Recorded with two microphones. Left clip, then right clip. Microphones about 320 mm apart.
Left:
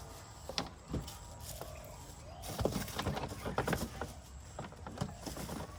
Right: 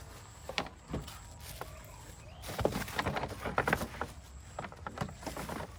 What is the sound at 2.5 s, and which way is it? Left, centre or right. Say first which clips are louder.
Clip-clop: right 4 dB; right.